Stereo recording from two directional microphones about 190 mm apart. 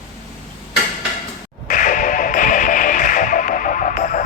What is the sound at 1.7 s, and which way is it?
Music, 45° left (ahead or behind).